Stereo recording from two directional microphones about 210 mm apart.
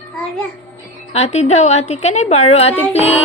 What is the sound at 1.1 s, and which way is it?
A woman's voice, 30° left (ahead or behind).